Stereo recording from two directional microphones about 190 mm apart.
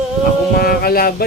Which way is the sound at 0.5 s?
50° left (ahead or behind).